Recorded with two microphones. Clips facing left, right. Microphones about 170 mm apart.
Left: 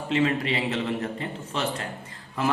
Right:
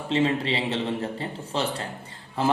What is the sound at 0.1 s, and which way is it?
A man's voice, 30° right (ahead or behind).